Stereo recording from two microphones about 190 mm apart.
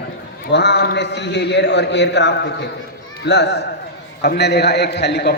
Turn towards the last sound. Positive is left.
turn(degrees=65)  # may be behind; listen again after turning